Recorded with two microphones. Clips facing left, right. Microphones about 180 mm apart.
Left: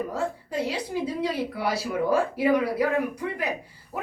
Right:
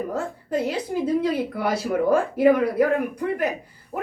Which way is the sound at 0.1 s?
50° right (ahead or behind).